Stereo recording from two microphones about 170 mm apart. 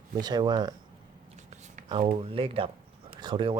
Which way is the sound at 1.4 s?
45° right (ahead or behind).